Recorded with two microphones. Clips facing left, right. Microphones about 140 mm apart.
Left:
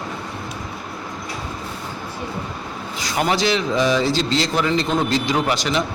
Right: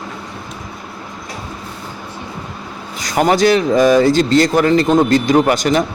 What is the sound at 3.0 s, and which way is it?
A man's voice, 45° right (ahead or behind).